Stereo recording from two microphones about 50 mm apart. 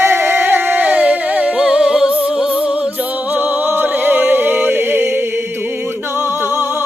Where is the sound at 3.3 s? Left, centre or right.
Right.